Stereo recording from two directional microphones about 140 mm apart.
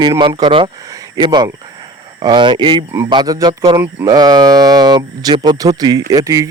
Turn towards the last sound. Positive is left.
turn(degrees=-25)  # may be behind; listen again after turning